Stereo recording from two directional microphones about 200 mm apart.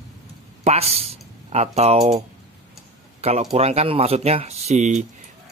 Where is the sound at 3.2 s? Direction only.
30° right (ahead or behind).